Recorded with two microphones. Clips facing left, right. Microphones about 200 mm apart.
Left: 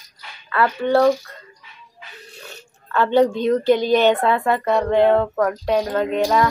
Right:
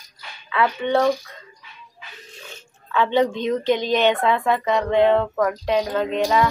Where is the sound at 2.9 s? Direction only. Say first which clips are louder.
Left 3 dB; 5° left (ahead or behind).